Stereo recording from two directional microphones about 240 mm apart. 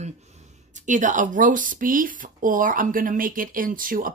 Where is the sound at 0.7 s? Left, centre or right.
Right.